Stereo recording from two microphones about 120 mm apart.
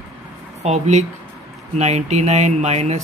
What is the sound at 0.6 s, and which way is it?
Speech, 70° right (ahead or behind).